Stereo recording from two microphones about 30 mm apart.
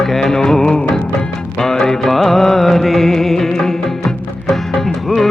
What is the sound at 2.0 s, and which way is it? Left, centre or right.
Music, centre.